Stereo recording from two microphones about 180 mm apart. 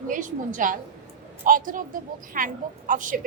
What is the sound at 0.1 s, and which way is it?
A woman's voice, 45° right (ahead or behind).